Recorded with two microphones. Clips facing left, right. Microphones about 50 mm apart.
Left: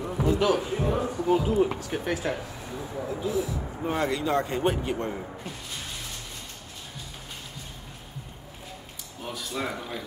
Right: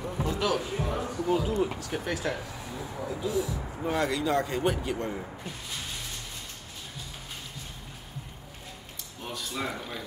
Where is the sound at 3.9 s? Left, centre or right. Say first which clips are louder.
Left 1 dB; left.